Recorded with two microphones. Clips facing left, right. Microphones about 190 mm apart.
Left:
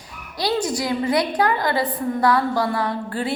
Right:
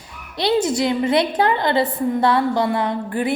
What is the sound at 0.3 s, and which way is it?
A woman's voice, 25° right (ahead or behind).